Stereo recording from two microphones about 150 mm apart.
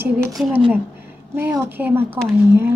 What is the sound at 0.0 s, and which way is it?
Speech, 15° right (ahead or behind).